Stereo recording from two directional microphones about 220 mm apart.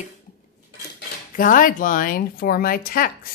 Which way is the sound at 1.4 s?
40° left (ahead or behind).